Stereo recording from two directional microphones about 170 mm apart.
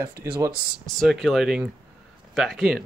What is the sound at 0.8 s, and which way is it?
Speech, centre (ahead or behind).